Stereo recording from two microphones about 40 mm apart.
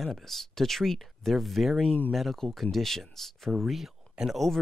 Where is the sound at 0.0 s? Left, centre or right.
Centre.